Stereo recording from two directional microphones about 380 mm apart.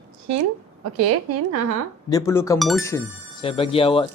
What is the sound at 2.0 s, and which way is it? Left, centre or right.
Speech, centre.